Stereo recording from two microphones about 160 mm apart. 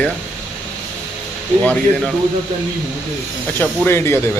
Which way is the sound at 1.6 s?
5° left (ahead or behind).